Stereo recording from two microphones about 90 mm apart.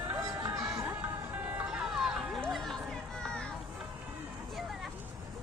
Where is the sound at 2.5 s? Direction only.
Centre (ahead or behind).